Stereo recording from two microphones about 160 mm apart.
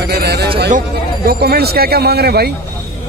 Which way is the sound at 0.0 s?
90° right.